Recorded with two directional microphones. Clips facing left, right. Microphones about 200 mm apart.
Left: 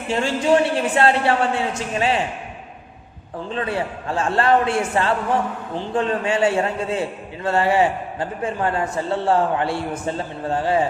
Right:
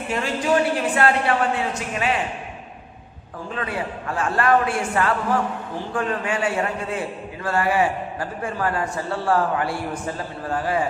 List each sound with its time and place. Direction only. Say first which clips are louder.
0.1 s a man's voice: left 4 dB; 30° left (ahead or behind)
3.5 s a man's voice: left 3 dB; 30° left (ahead or behind)